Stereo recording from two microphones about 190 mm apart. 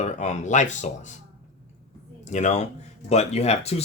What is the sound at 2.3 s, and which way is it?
Speech, 40° left (ahead or behind).